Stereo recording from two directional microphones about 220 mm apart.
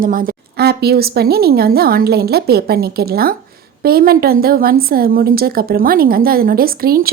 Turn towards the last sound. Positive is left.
turn(degrees=-40)  # may be behind; listen again after turning